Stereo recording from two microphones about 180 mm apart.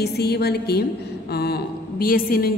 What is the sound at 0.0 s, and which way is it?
A woman's voice, 60° left (ahead or behind).